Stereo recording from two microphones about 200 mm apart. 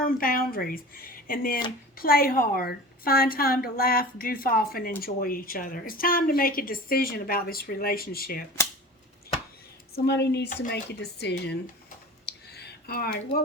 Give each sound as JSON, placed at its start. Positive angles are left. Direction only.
{"t": 0.0, "sound": "a woman's voice", "side_deg": 45}
{"t": 9.9, "sound": "speech", "side_deg": 55}
{"t": 12.2, "sound": "a sound", "side_deg": 55}